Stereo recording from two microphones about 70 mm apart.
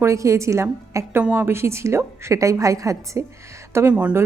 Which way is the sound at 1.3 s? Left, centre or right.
Right.